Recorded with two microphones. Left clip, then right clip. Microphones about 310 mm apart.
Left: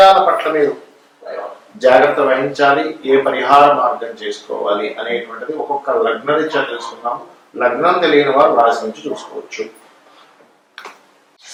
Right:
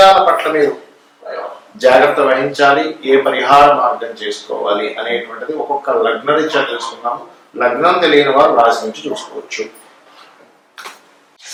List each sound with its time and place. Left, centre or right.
0.0 s a sound: centre
0.3 s speech: centre
1.3 s a sound: centre
1.9 s a man's voice: centre
4.1 s speech: centre
4.4 s a man's voice: left
4.7 s a man's voice: centre
5.5 s a man's voice: left; by 6.8 s centre
6.9 s a man's voice: centre
8.4 s a man's voice: centre